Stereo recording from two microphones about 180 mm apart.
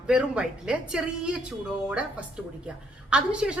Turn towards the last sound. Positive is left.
turn(degrees=-5)  # may be behind; listen again after turning